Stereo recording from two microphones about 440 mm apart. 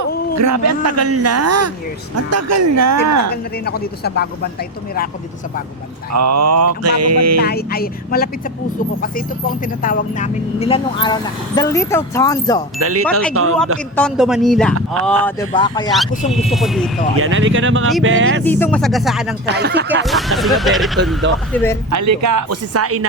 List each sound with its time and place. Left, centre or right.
0.3 s speech: right
3.2 s speech: left
6.1 s speech: right
7.4 s speech: left
12.8 s speech: right
13.9 s speech: centre
17.2 s speech: right
18.4 s speech: centre
19.5 s speech: right
20.1 s speech: centre
21.8 s speech: right